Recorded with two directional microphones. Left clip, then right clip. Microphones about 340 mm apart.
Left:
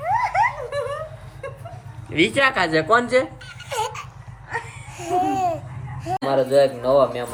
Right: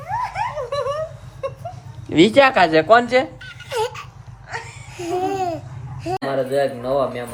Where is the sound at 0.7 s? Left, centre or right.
Centre.